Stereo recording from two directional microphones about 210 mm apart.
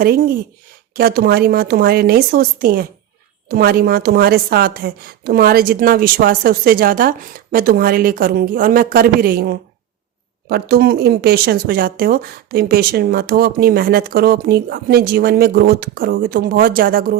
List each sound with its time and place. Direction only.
0.0 s speech: 45° right (ahead or behind)